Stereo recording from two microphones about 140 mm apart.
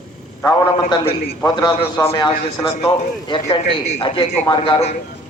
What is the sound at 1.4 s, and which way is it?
A man's voice, 25° left (ahead or behind).